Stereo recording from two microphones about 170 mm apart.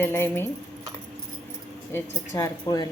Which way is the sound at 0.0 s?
15° left (ahead or behind).